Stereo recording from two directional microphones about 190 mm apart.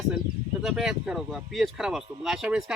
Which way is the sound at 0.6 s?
Centre (ahead or behind).